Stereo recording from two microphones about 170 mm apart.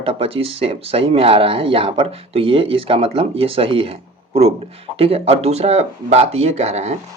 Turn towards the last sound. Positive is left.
turn(degrees=-40)  # may be behind; listen again after turning